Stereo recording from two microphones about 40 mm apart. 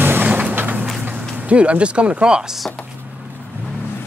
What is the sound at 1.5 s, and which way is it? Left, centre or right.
Speech, right.